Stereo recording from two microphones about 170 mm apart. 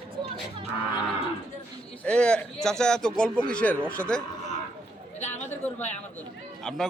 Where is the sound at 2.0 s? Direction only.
5° left (ahead or behind).